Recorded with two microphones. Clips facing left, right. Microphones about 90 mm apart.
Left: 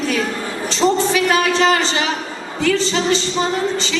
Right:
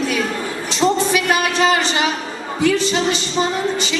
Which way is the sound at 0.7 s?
15° right (ahead or behind).